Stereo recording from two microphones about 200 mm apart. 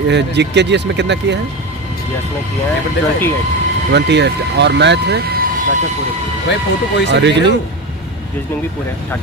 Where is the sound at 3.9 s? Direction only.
60° right (ahead or behind).